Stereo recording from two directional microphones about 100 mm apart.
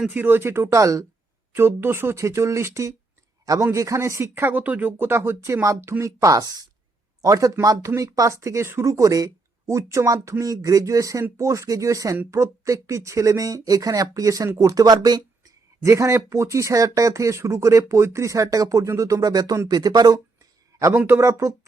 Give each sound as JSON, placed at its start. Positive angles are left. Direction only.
{"t": 0.1, "sound": "speech", "side_deg": -20}
{"t": 15.8, "sound": "speech", "side_deg": -30}
{"t": 20.9, "sound": "speech", "side_deg": -20}